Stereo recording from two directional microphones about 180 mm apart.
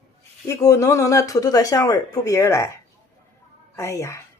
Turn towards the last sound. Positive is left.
turn(degrees=15)  # may be behind; listen again after turning